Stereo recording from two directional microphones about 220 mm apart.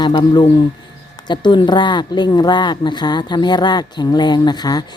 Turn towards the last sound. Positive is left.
turn(degrees=20)  # may be behind; listen again after turning